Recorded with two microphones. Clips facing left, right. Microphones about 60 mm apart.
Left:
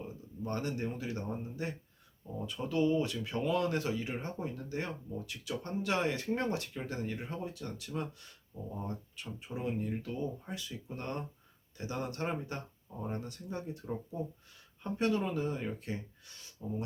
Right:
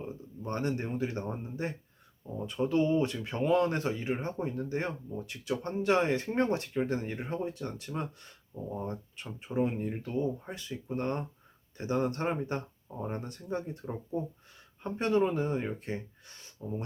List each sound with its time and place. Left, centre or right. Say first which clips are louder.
0.0 s speech: right 2 dB; right
13.8 s speech: right 3 dB; centre
14.8 s speech: right 4 dB; right